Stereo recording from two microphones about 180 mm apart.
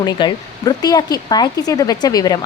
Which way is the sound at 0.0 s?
25° left (ahead or behind).